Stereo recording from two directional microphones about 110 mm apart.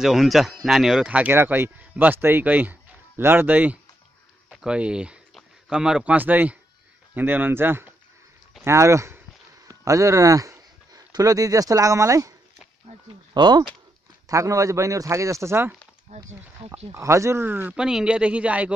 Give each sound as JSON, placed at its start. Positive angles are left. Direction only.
{"t": 0.0, "sound": "speech", "side_deg": 0}
{"t": 13.3, "sound": "speech", "side_deg": -40}
{"t": 14.2, "sound": "speech", "side_deg": -30}
{"t": 16.1, "sound": "speech", "side_deg": -90}
{"t": 16.9, "sound": "speech", "side_deg": -25}
{"t": 17.7, "sound": "speech", "side_deg": -5}